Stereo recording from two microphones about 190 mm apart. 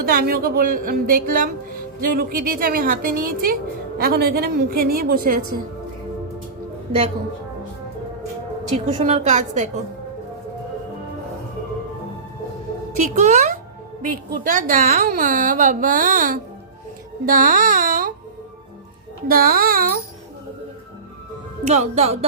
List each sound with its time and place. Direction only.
0.0 s a woman's voice: 50° right (ahead or behind)
8.7 s a woman's voice: 35° right (ahead or behind)
13.0 s a woman's voice: 40° right (ahead or behind)
19.3 s a woman's voice: 50° right (ahead or behind)
21.7 s a woman's voice: 35° right (ahead or behind)